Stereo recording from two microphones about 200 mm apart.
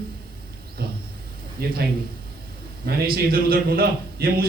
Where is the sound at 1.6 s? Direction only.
50° right (ahead or behind).